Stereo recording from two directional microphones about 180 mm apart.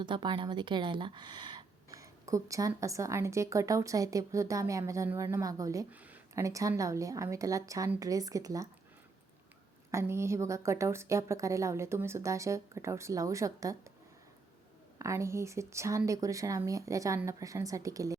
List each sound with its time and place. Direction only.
0.0 s a woman's voice: 25° right (ahead or behind)
9.9 s a woman's voice: 15° right (ahead or behind)
14.9 s a woman's voice: 15° right (ahead or behind)